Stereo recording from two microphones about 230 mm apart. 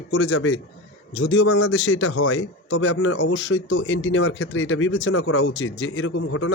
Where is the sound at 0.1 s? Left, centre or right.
Left.